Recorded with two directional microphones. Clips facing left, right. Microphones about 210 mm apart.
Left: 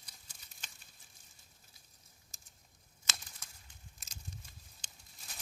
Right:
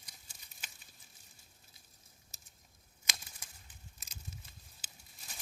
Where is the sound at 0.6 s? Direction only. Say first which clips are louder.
Right 1 dB; 10° right (ahead or behind).